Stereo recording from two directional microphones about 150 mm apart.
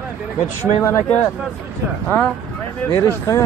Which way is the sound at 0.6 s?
15° left (ahead or behind).